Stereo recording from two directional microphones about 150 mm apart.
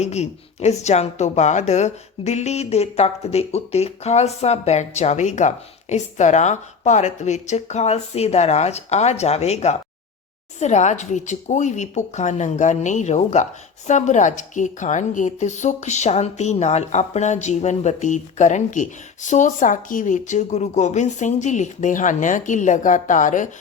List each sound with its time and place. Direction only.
0.0 s speech: 45° left (ahead or behind)